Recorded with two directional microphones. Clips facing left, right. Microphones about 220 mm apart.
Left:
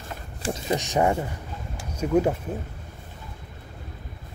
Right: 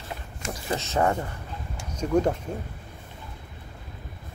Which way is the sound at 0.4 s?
25° left (ahead or behind).